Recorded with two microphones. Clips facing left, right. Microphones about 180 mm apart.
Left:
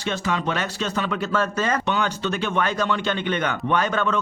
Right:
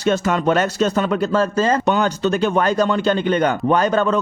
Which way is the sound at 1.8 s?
40° right (ahead or behind).